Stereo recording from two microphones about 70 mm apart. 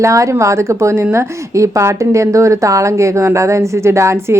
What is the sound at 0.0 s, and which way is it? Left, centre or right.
A woman's voice, right.